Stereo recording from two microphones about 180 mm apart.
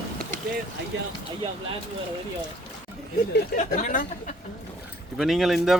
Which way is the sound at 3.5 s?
50° left (ahead or behind).